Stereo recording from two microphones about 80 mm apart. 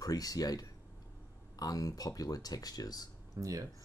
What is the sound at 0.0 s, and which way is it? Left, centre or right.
Speech, left.